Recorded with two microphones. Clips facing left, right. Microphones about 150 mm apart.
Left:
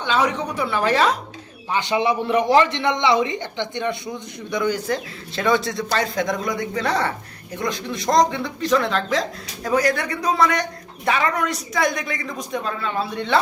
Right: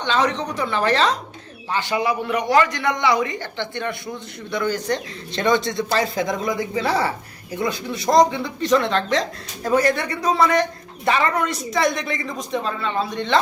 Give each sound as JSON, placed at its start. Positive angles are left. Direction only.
{"t": 0.0, "sound": "a woman's voice", "side_deg": 10}
{"t": 4.9, "sound": "a man's voice", "side_deg": 5}